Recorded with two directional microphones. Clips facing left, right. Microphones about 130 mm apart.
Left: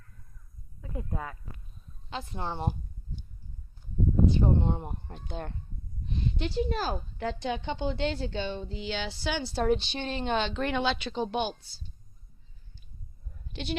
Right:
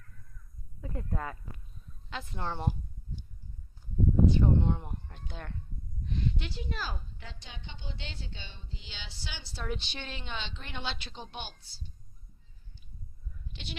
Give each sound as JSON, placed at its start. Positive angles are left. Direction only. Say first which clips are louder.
{"t": 0.9, "sound": "speech", "louder": "left 1 dB", "side_deg": 5}
{"t": 2.3, "sound": "a woman's voice", "louder": "left 1 dB", "side_deg": 20}
{"t": 4.4, "sound": "speech", "louder": "left 1 dB", "side_deg": 30}
{"t": 6.1, "sound": "a sound", "louder": "left 1 dB", "side_deg": 20}
{"t": 6.4, "sound": "speech", "louder": "left 10 dB", "side_deg": 40}
{"t": 7.2, "sound": "a woman's voice", "louder": "left 18 dB", "side_deg": 65}
{"t": 9.5, "sound": "a woman's voice", "louder": "left 12 dB", "side_deg": 40}
{"t": 9.7, "sound": "speech", "louder": "left 9 dB", "side_deg": 30}
{"t": 10.2, "sound": "a woman's voice", "louder": "left 13 dB", "side_deg": 55}
{"t": 13.3, "sound": "bleat", "louder": "left 11 dB", "side_deg": 50}